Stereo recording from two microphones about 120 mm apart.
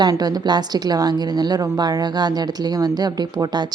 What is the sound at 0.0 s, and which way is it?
A woman's voice, 35° right (ahead or behind).